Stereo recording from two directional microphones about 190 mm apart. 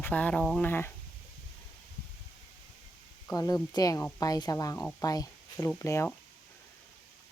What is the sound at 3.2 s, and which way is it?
Speech, 15° left (ahead or behind).